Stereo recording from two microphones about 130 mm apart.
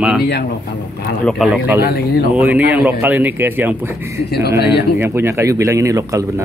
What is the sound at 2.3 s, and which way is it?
Speech, 10° right (ahead or behind).